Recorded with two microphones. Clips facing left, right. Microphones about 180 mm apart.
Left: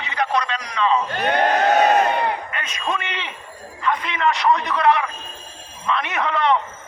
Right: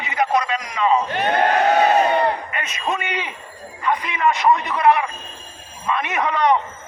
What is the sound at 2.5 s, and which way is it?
A man's voice, 10° right (ahead or behind).